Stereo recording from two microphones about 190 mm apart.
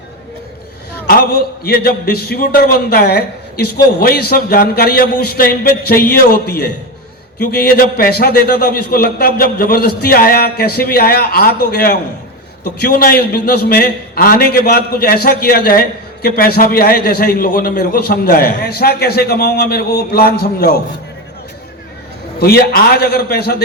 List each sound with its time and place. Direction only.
1.0 s a man's voice: 50° left (ahead or behind)
22.4 s a man's voice: 55° left (ahead or behind)